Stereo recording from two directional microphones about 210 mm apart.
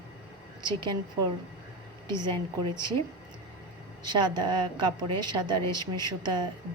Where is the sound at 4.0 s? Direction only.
20° right (ahead or behind).